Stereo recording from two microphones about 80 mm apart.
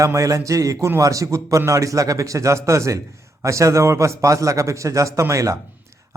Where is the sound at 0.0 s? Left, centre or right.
Right.